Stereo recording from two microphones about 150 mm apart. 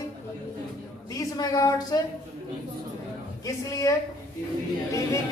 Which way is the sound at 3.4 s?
20° left (ahead or behind).